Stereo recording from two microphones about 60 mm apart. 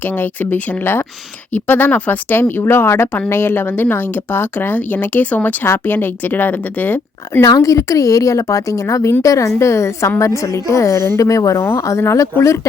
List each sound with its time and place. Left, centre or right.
0.0 s speech: left
7.4 s a woman's voice: left
9.6 s a woman's voice: left
11.3 s speech: left
11.8 s a woman's voice: left